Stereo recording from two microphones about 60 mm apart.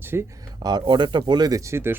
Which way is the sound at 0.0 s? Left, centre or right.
Right.